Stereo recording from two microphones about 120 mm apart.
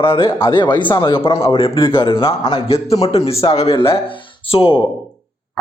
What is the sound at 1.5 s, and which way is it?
A man's voice, 50° left (ahead or behind).